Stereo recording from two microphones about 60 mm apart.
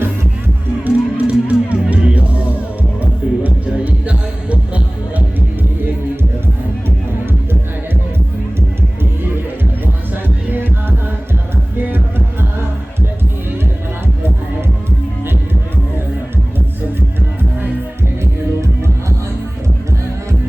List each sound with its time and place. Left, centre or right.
0.9 s music: right
9.8 s music: right